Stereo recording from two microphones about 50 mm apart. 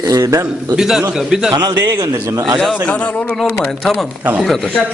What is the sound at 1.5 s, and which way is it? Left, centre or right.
Speech, right.